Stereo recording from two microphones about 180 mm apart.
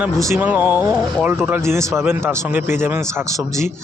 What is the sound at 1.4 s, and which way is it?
A man's voice, 10° right (ahead or behind).